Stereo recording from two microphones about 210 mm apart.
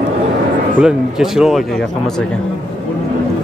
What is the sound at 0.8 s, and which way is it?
Speech, 5° right (ahead or behind).